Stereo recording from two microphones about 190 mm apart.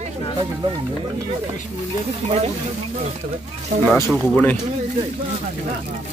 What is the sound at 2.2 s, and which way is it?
Speech, 35° right (ahead or behind).